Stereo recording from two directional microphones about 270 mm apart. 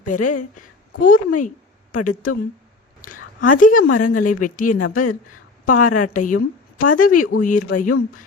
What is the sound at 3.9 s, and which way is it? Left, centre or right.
Speech, left.